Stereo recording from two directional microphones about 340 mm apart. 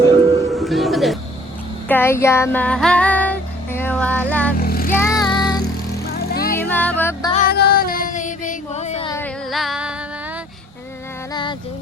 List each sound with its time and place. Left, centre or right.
0.4 s music: centre
1.9 s child singing: centre
4.6 s vehicle: left
4.9 s music: centre
6.1 s music: left
6.6 s music: centre
7.5 s a sound: left; by 9.9 s centre